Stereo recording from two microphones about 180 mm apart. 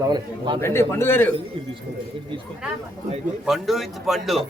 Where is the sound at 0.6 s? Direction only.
15° left (ahead or behind).